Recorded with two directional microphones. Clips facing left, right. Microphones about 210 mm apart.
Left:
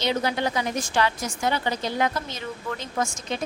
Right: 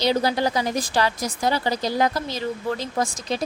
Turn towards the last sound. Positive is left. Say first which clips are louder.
# right 3 dB
turn(degrees=-35)  # may be behind; listen again after turning